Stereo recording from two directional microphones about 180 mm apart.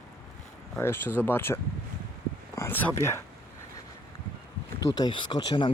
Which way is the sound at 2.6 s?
15° left (ahead or behind).